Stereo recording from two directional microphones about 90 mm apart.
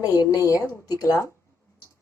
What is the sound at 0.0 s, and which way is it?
A woman's voice, 40° left (ahead or behind).